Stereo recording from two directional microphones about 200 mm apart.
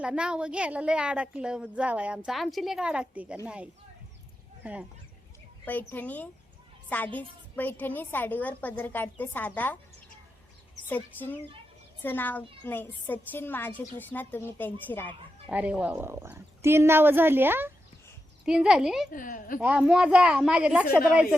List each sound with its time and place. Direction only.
0.0 s a woman's voice: 5° right (ahead or behind)
5.6 s a woman's voice: 10° left (ahead or behind)
10.8 s a woman's voice: 10° left (ahead or behind)
15.4 s a woman's voice: 5° right (ahead or behind)
19.1 s a woman's voice: 40° left (ahead or behind)
19.5 s a woman's voice: 5° right (ahead or behind)